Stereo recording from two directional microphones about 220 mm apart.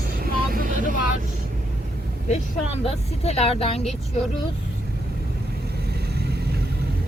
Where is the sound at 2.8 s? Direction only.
25° left (ahead or behind).